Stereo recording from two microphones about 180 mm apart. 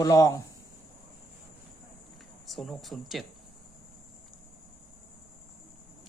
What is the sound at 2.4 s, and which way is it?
Speech, centre (ahead or behind).